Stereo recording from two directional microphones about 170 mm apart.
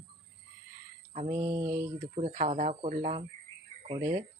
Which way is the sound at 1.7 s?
40° right (ahead or behind).